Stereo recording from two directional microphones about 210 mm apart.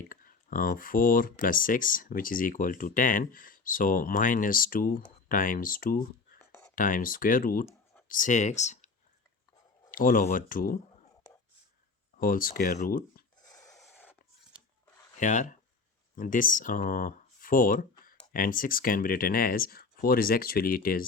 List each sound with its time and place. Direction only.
0.1 s speech: 40° left (ahead or behind)
9.9 s speech: 40° left (ahead or behind)
12.2 s speech: 40° left (ahead or behind)
13.5 s a sound: 15° left (ahead or behind)
13.7 s a sound: 5° left (ahead or behind)
15.2 s speech: 35° left (ahead or behind)